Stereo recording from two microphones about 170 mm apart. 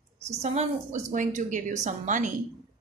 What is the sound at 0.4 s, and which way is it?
A woman's voice, 40° right (ahead or behind).